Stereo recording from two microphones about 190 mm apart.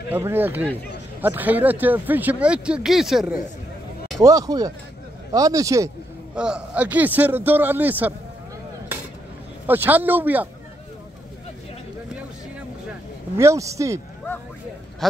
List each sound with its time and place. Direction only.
0.1 s speech: 10° right (ahead or behind)
4.2 s speech: 20° right (ahead or behind)
6.3 s speech: 5° right (ahead or behind)
9.7 s speech: 10° right (ahead or behind)
13.4 s speech: 15° right (ahead or behind)